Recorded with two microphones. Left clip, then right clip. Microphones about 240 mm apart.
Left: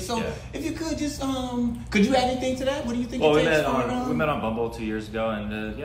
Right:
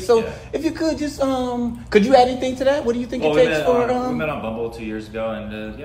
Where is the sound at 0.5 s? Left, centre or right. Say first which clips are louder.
Right 13 dB; right.